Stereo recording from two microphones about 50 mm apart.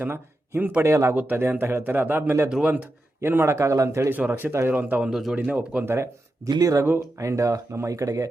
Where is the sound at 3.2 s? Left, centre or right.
Right.